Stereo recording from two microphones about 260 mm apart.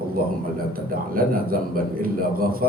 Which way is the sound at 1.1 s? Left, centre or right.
Right.